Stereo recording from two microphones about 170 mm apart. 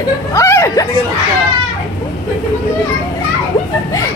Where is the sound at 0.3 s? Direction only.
15° left (ahead or behind).